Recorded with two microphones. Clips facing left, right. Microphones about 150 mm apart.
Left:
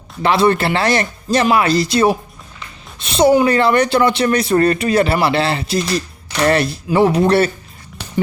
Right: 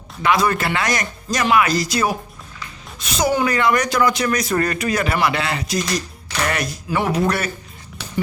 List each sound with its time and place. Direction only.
0.2 s speech: 30° left (ahead or behind)